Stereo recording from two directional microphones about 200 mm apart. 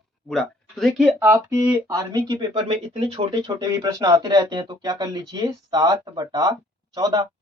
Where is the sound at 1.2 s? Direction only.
15° right (ahead or behind); by 3.6 s 30° right (ahead or behind).